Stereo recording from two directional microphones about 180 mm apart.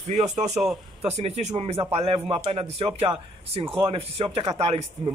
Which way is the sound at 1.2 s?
35° right (ahead or behind).